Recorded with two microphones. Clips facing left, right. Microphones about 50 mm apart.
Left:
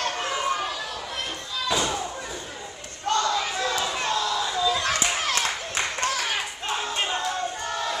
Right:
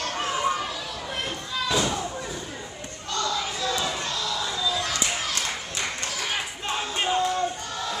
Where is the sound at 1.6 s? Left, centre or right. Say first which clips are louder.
Even; centre.